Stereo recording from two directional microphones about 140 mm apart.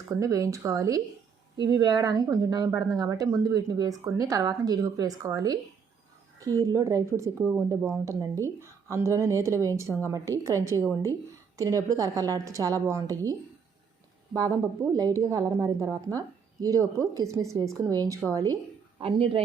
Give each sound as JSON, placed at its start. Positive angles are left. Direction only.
{"t": 0.1, "sound": "a woman's voice", "side_deg": -25}
{"t": 6.6, "sound": "a woman's voice", "side_deg": -25}
{"t": 14.9, "sound": "a woman's voice", "side_deg": -25}
{"t": 18.9, "sound": "speech", "side_deg": -35}